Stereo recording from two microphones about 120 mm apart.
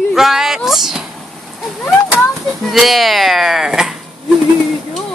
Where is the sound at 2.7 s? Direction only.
Centre (ahead or behind).